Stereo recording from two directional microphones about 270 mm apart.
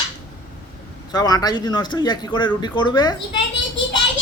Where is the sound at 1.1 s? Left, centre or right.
Centre.